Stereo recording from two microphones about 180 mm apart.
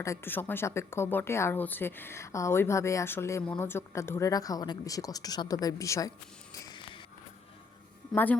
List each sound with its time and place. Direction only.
0.0 s speech: 15° left (ahead or behind)
6.5 s a sound: 20° left (ahead or behind)
8.1 s speech: 10° left (ahead or behind)